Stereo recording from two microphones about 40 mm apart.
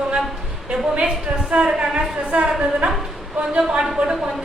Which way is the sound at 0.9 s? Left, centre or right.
Right.